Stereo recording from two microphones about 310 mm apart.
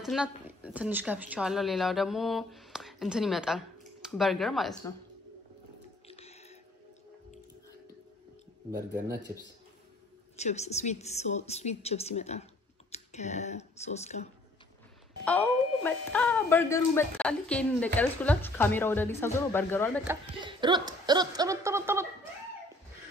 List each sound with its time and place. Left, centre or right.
0.0 s speech: centre
6.0 s a sound: centre
8.7 s speech: centre
10.3 s a woman's voice: left
15.2 s speech: centre
20.1 s speech: centre